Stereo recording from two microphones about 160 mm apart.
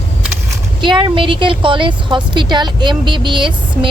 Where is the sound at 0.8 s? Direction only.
30° right (ahead or behind).